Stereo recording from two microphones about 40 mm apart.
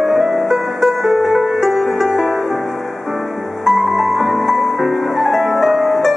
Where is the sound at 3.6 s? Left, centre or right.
Centre.